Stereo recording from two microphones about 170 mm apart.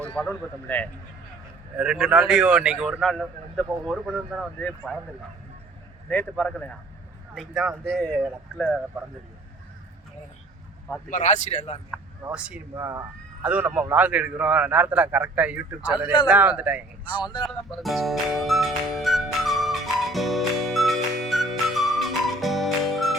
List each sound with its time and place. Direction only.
0.1 s speech: 10° left (ahead or behind)
1.7 s a man's voice: 5° right (ahead or behind)
6.1 s a man's voice: 10° left (ahead or behind)
7.9 s a man's voice: 5° left (ahead or behind)
11.1 s speech: 45° left (ahead or behind)
12.2 s a man's voice: 5° right (ahead or behind)
12.8 s a man's voice: 20° right (ahead or behind)
17.1 s speech: 25° left (ahead or behind)
17.8 s music: centre (ahead or behind)